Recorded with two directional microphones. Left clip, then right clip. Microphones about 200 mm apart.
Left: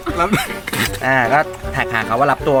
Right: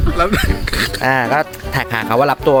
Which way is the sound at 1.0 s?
55° right (ahead or behind).